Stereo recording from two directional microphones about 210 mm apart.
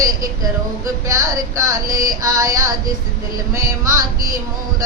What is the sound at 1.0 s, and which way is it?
Music, 15° right (ahead or behind).